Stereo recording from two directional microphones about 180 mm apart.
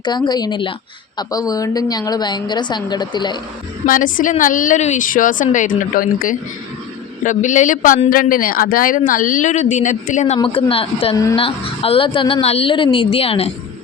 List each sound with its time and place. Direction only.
0.0 s a woman's voice: 25° left (ahead or behind)
3.8 s a man's voice: 50° left (ahead or behind)
10.3 s a woman's voice: 30° left (ahead or behind)